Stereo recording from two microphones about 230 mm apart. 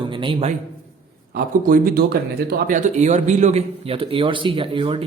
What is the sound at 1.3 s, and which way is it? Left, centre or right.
Speech, right.